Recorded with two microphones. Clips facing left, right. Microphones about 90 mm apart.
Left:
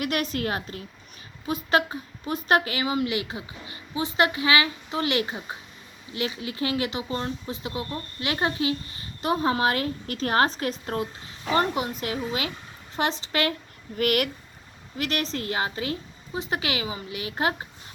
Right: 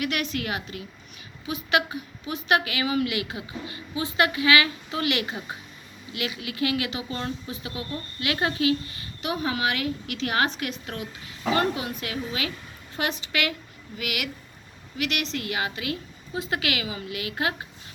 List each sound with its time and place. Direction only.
0.0 s a woman's voice: 35° left (ahead or behind)
9.2 s a woman's voice: 35° left (ahead or behind)
13.9 s speech: 45° left (ahead or behind)
14.9 s a woman's voice: 35° left (ahead or behind)